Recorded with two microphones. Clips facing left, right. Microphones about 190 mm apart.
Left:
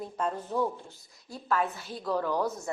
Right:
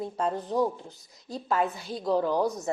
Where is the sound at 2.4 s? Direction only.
20° right (ahead or behind).